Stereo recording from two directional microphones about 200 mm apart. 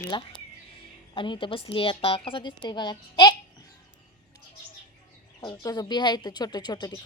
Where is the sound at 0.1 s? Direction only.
25° left (ahead or behind).